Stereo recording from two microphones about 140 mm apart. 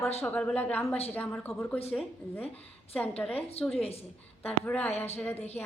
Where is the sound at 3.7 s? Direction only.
45° left (ahead or behind).